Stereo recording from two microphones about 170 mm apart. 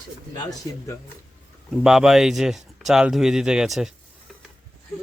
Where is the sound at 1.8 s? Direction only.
Centre (ahead or behind).